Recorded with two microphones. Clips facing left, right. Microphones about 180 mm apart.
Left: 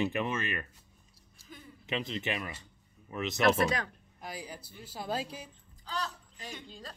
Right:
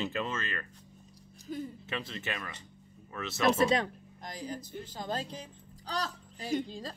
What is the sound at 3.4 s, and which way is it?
Speech, 25° right (ahead or behind).